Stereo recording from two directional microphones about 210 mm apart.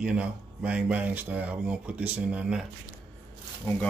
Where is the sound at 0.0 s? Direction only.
5° right (ahead or behind).